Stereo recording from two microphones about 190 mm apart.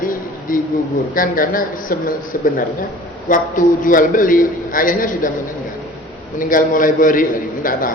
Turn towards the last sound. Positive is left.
turn(degrees=45)  # may be behind; listen again after turning